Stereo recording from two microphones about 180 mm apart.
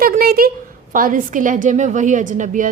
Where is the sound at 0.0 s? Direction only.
55° right (ahead or behind).